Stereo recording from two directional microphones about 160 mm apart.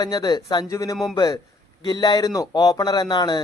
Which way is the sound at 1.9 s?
25° left (ahead or behind).